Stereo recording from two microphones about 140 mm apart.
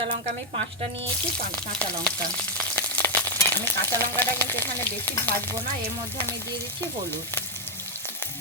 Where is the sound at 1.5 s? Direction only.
10° left (ahead or behind).